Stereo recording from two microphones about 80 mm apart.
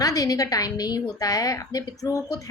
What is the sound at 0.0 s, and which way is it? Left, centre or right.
A woman's voice, left.